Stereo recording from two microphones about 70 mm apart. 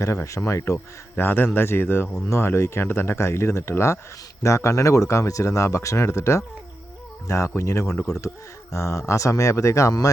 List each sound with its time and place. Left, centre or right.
0.0 s speech: left